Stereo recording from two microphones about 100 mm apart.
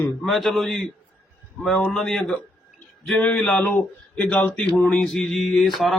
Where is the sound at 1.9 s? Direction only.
5° left (ahead or behind).